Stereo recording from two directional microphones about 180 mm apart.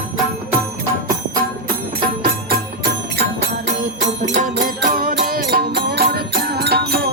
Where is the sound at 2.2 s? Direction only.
60° right (ahead or behind).